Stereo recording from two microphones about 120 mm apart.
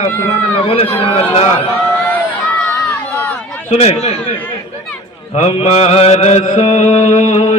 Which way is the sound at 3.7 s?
60° left (ahead or behind).